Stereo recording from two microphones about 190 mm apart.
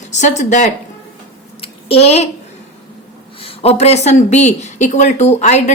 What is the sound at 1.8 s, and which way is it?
Speech, 30° left (ahead or behind).